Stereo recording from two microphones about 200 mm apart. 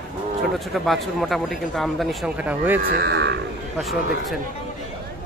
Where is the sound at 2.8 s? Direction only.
50° right (ahead or behind).